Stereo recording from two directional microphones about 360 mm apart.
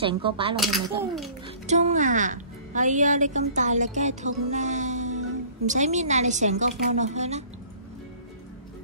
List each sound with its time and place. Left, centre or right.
0.0 s speech: centre
0.6 s a child's voice: centre
1.7 s speech: centre